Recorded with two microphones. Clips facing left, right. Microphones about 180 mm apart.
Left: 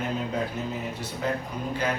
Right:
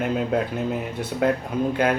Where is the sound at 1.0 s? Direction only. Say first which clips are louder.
Right 11 dB; 55° right (ahead or behind).